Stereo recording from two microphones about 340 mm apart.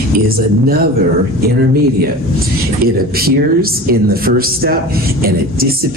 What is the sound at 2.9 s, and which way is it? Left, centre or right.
Speech, right.